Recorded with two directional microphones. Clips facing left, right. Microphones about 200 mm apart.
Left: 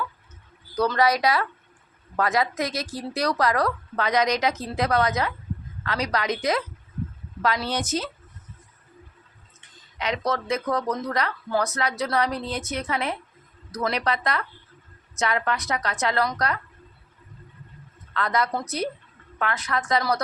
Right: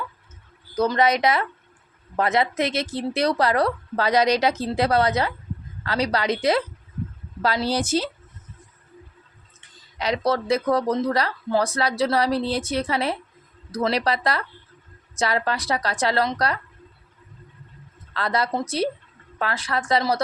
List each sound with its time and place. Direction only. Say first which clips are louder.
0.8 s speech: right 2 dB; 20° right (ahead or behind)
9.6 s speech: right 3 dB; 35° right (ahead or behind)
18.1 s speech: right 1 dB; 30° right (ahead or behind)